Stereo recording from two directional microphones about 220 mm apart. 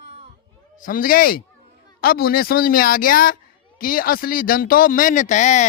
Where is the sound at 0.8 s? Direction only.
40° left (ahead or behind).